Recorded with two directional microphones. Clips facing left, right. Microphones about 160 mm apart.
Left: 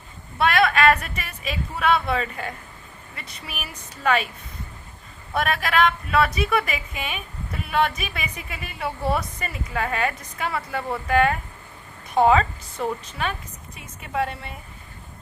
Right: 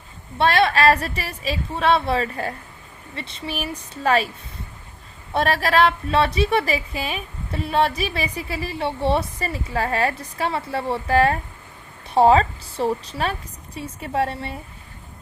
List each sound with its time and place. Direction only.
0.3 s a woman's voice: 30° right (ahead or behind)
5.3 s a woman's voice: 30° right (ahead or behind)